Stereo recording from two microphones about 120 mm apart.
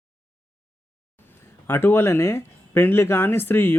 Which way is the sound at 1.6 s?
20° left (ahead or behind).